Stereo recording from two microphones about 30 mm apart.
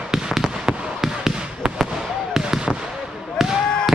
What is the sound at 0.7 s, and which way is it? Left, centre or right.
Fireworks, right.